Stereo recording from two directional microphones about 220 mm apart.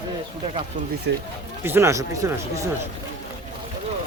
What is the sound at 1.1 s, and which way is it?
Speech, 55° right (ahead or behind).